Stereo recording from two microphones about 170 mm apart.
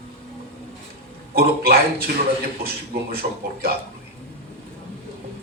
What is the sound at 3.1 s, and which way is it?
Speech, 65° right (ahead or behind).